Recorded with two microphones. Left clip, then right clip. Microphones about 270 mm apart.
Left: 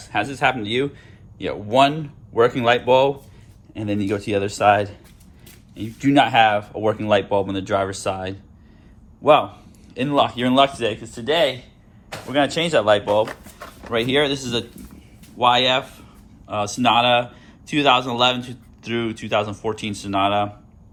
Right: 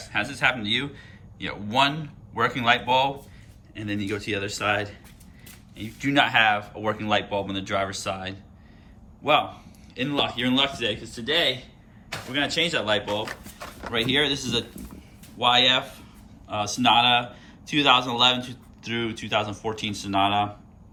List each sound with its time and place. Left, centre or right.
0.1 s a man's voice: centre